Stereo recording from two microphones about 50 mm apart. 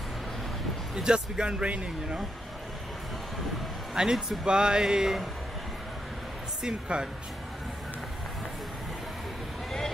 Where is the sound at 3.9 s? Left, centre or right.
Centre.